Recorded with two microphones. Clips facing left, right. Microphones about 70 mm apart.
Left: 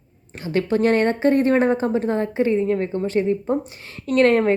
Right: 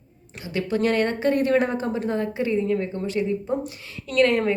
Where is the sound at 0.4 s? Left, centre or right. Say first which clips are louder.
Left 4 dB; left.